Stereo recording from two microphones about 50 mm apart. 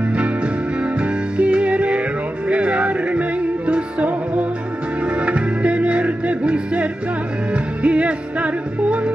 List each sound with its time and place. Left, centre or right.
0.8 s music: right